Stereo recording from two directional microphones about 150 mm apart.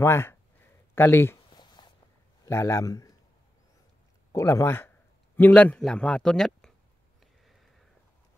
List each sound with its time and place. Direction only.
0.0 s speech: 15° left (ahead or behind)
1.5 s a sound: 30° left (ahead or behind)
2.4 s speech: 20° left (ahead or behind)
4.3 s a man's voice: 20° left (ahead or behind); by 6.7 s 5° left (ahead or behind)